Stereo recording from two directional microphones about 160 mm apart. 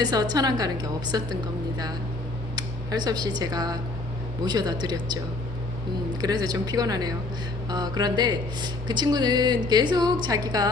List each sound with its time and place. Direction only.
0.0 s speech: 25° right (ahead or behind)
2.6 s speech: 25° right (ahead or behind)
6.2 s speech: 25° right (ahead or behind)